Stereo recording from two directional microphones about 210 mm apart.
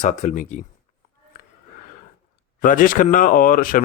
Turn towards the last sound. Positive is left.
turn(degrees=40)  # may be behind; listen again after turning